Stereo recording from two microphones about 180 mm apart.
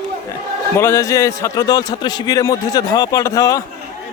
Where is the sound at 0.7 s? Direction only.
15° left (ahead or behind).